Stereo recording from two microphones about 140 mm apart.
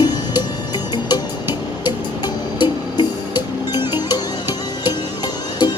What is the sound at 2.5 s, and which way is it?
Music, 30° left (ahead or behind).